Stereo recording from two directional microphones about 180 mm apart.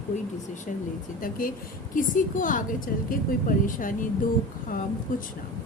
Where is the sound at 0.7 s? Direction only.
45° left (ahead or behind).